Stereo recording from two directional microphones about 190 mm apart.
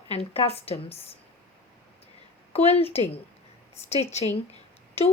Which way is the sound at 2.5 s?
30° left (ahead or behind).